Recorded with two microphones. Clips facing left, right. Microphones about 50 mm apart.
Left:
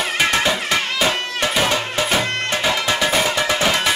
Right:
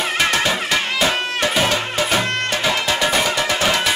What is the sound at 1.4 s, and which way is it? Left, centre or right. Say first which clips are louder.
Music: even; centre.